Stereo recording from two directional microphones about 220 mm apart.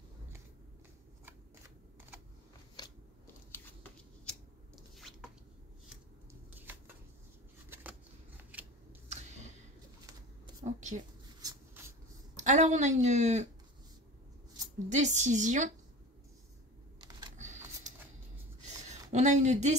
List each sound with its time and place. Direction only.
4.3 s biting: centre (ahead or behind)
6.5 s a sound: 10° right (ahead or behind)
8.4 s scissors: 5° right (ahead or behind)
10.6 s a sound: 30° right (ahead or behind)
11.4 s a sound: 10° right (ahead or behind)
12.4 s speech: 35° right (ahead or behind)
14.9 s speech: 35° right (ahead or behind)
17.0 s computer keyboard: 20° right (ahead or behind)
19.1 s speech: 30° right (ahead or behind)